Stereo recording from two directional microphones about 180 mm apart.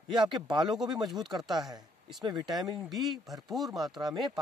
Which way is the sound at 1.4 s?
Centre (ahead or behind).